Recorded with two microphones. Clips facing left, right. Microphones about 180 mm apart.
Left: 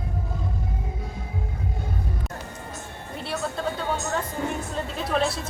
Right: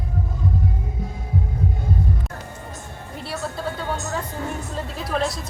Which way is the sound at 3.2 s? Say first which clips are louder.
Even; centre (ahead or behind).